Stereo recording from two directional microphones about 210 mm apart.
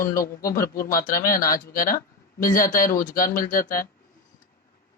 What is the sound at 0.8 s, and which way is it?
Speech, 15° left (ahead or behind).